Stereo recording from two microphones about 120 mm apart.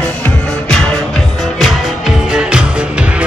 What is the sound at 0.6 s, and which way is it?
Music, 10° left (ahead or behind).